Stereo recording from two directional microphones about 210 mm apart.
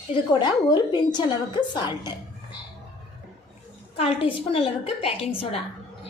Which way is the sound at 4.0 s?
25° left (ahead or behind).